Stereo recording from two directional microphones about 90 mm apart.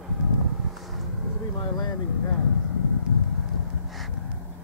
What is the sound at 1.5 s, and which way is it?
Vehicle, 50° left (ahead or behind).